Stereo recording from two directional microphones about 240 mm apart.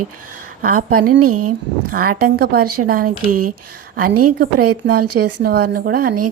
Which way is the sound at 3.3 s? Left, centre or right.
Right.